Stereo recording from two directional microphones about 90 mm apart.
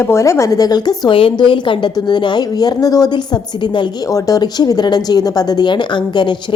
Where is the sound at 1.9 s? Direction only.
50° left (ahead or behind).